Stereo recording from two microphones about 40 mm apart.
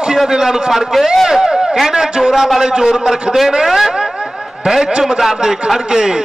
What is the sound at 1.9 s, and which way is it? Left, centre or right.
A man's voice, centre.